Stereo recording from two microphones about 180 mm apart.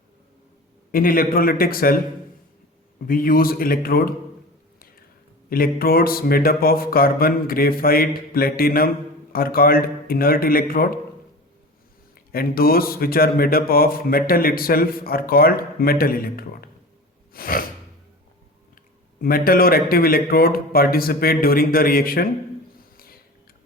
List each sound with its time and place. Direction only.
0.9 s a man's voice: 50° left (ahead or behind)
3.1 s a man's voice: 50° left (ahead or behind)
5.5 s speech: 55° left (ahead or behind)
12.1 s a man's voice: 55° left (ahead or behind)
19.2 s speech: 55° left (ahead or behind)
23.0 s a sound: 55° left (ahead or behind)